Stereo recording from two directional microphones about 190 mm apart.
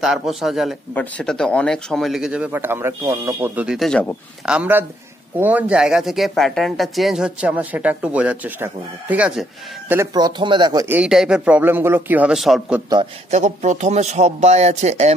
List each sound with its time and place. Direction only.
0.0 s speech: centre (ahead or behind)
4.5 s speech: 10° right (ahead or behind)
9.9 s speech: 20° right (ahead or behind)
11.0 s speech: 5° right (ahead or behind)
13.3 s speech: 35° right (ahead or behind)